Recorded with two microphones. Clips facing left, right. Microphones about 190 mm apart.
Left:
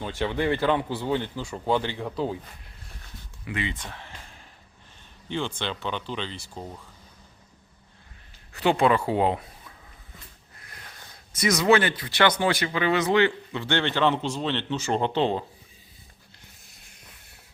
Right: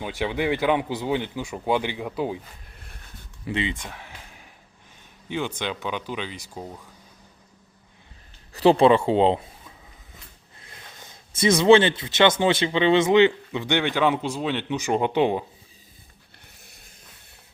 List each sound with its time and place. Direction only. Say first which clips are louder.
0.0 s speech: right 1 dB; 10° right (ahead or behind)
3.4 s speech: right 4 dB; 25° right (ahead or behind)
3.8 s a sound: right 1 dB; 10° right (ahead or behind)
5.3 s speech: right 2 dB; 10° right (ahead or behind)
8.5 s speech: right 5 dB; 35° right (ahead or behind); by 15.4 s 15° right (ahead or behind)